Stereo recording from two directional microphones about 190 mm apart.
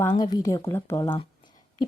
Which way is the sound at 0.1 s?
20° left (ahead or behind).